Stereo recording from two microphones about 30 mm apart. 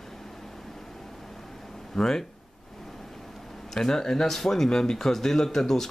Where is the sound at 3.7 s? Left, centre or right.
Centre.